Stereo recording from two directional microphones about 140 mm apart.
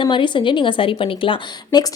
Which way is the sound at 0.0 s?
35° left (ahead or behind).